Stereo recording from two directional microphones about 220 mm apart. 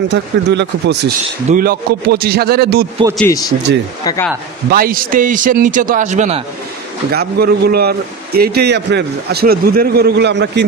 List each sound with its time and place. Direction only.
0.1 s a man's voice: 50° right (ahead or behind)
4.0 s speech: 15° left (ahead or behind)
4.6 s a man's voice: 40° right (ahead or behind)
7.1 s a man's voice: 45° right (ahead or behind)